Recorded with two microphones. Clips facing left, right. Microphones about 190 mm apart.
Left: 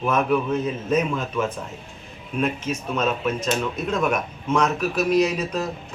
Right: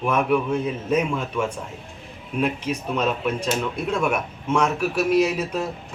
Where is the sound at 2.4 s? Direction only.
15° right (ahead or behind).